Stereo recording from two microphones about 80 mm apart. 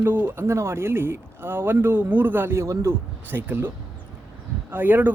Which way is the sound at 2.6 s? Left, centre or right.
Right.